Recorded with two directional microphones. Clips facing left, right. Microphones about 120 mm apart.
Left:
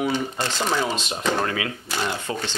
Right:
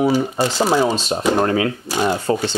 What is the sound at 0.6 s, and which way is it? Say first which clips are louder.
Speech: right 7 dB; 40° right (ahead or behind).